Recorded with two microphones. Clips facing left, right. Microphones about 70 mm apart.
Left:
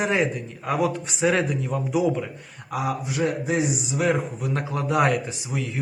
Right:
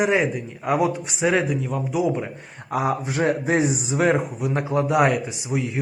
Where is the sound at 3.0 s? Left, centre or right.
Right.